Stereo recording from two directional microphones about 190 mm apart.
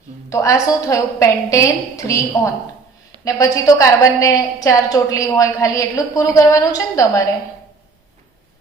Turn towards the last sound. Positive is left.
turn(degrees=20)  # may be behind; listen again after turning